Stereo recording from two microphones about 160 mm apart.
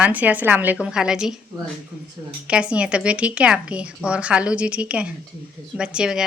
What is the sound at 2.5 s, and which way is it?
A woman's voice, 5° right (ahead or behind).